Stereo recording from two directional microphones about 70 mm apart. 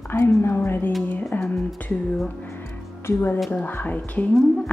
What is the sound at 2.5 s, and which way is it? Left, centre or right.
Music, left.